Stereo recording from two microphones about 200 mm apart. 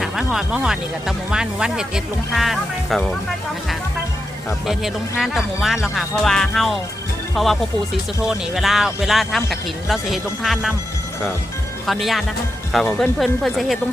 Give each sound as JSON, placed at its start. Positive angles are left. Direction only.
{"t": 0.0, "sound": "speech", "side_deg": 0}
{"t": 4.6, "sound": "speech", "side_deg": 0}
{"t": 11.9, "sound": "speech", "side_deg": 0}